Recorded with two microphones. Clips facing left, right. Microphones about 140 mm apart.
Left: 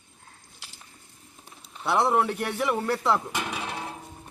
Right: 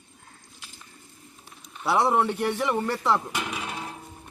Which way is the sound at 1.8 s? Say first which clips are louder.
Right 1 dB; centre (ahead or behind).